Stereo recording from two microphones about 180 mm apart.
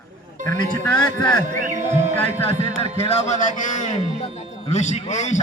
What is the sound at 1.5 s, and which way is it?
Speech, 45° right (ahead or behind).